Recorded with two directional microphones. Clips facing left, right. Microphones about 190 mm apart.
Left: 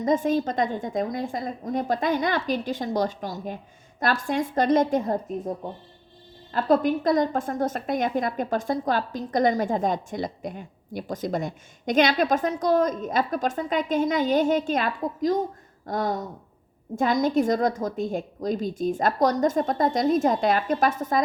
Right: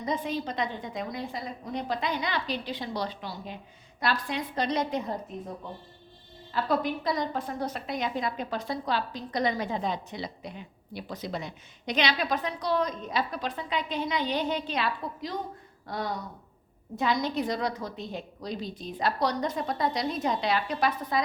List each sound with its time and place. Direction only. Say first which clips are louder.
0.0 s a woman's voice: left 8 dB; 45° left (ahead or behind)
6.5 s a woman's voice: left 7 dB; 45° left (ahead or behind)